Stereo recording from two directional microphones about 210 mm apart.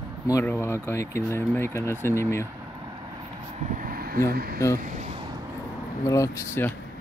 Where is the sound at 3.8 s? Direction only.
45° right (ahead or behind).